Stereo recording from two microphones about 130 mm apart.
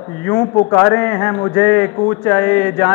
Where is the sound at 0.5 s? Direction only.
10° left (ahead or behind).